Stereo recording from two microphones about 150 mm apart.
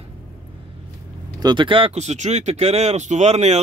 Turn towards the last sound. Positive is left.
turn(degrees=-45)  # may be behind; listen again after turning